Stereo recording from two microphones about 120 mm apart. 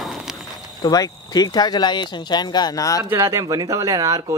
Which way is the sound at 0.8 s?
35° left (ahead or behind).